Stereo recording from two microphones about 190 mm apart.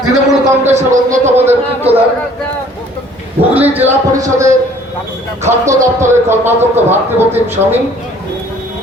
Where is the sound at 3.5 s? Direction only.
10° right (ahead or behind).